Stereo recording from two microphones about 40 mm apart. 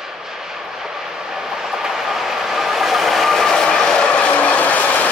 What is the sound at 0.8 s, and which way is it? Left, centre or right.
Train, centre.